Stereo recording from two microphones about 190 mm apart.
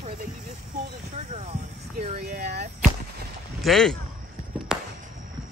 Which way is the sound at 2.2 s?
55° right (ahead or behind).